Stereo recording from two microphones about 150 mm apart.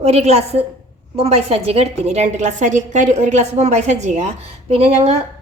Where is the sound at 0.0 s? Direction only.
45° right (ahead or behind).